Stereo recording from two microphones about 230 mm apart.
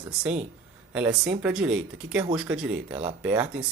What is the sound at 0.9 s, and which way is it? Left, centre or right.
Speech, centre.